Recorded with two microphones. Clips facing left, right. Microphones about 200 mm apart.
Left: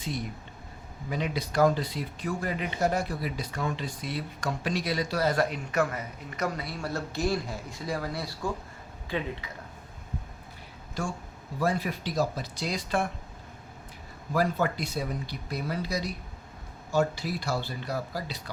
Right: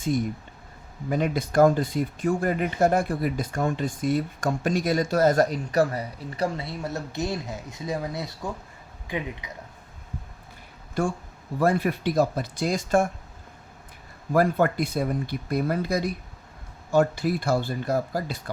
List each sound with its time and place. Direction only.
0.0 s speech: 50° right (ahead or behind); by 9.5 s 15° right (ahead or behind)
11.0 s speech: 55° right (ahead or behind)
14.3 s speech: 55° right (ahead or behind)